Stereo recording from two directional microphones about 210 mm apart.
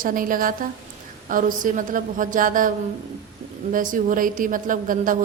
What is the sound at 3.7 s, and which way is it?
A woman's voice, 40° right (ahead or behind).